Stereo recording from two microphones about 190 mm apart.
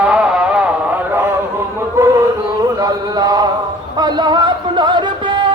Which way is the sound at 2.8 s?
20° right (ahead or behind).